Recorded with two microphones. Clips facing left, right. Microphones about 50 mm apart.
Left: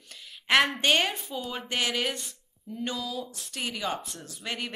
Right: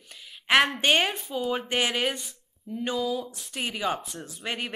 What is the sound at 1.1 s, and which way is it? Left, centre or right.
Speech, centre.